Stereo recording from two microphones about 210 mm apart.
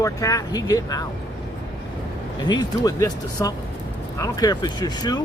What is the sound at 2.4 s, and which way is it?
Speech, 20° left (ahead or behind).